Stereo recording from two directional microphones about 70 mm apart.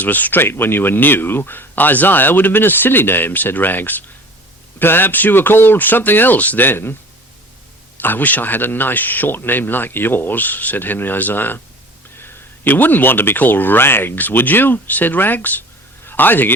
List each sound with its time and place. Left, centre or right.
0.0 s speech: left
8.0 s speech: left